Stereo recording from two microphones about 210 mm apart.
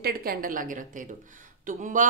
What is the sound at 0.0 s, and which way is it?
Speech, 45° right (ahead or behind).